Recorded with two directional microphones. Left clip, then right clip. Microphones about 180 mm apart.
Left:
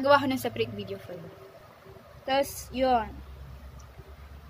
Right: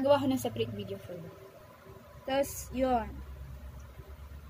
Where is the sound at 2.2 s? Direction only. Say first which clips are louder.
Left 4 dB; 5° right (ahead or behind).